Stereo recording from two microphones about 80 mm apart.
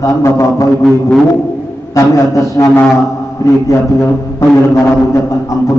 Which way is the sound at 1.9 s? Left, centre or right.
Left.